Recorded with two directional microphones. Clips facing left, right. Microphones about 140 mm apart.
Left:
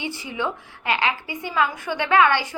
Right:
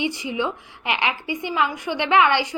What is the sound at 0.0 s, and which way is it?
A woman's voice, 15° right (ahead or behind).